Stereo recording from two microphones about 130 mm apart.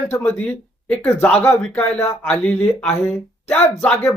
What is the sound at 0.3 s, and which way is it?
Speech, 15° left (ahead or behind).